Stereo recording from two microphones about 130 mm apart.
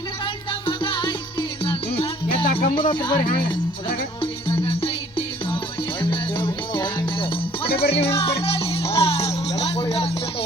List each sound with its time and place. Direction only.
0.7 s music: 35° left (ahead or behind)
4.2 s music: 45° left (ahead or behind)